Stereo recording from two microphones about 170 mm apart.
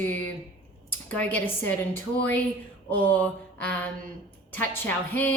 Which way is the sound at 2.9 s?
10° left (ahead or behind).